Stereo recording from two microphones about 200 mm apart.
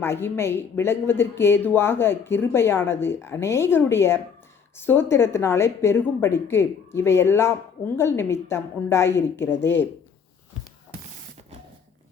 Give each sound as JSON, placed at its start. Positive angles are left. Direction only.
{"t": 0.0, "sound": "speech", "side_deg": 10}